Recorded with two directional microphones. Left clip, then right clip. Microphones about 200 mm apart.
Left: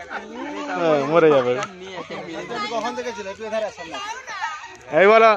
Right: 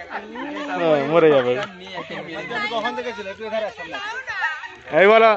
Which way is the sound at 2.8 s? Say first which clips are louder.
Right 1 dB; 10° left (ahead or behind).